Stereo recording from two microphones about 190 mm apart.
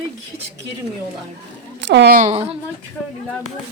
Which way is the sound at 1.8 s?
60° right (ahead or behind).